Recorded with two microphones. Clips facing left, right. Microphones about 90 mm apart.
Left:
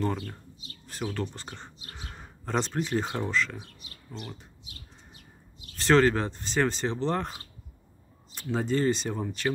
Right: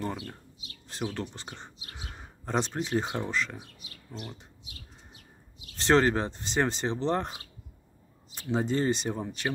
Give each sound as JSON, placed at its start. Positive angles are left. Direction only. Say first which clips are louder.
{"t": 0.0, "sound": "speech", "louder": "left 4 dB", "side_deg": -10}
{"t": 4.1, "sound": "speech", "louder": "left 1 dB", "side_deg": -5}
{"t": 5.8, "sound": "speech", "louder": "left 1 dB", "side_deg": -20}